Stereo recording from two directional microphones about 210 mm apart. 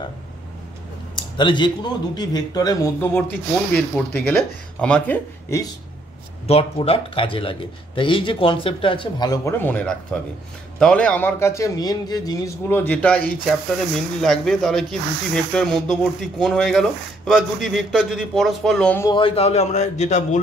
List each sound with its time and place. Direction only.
1.1 s a sound: 20° left (ahead or behind)
2.1 s a man's voice: 20° left (ahead or behind)
6.4 s a man's voice: 30° left (ahead or behind); by 19.0 s 5° left (ahead or behind)
19.0 s a man's voice: 25° left (ahead or behind)